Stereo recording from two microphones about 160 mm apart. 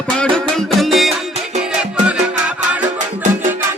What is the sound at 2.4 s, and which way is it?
Music, 10° right (ahead or behind).